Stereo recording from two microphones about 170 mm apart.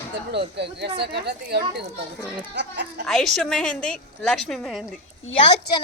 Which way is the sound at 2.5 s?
90° right.